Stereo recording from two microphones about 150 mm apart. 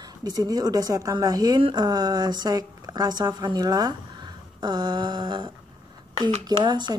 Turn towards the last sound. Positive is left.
turn(degrees=-30)  # may be behind; listen again after turning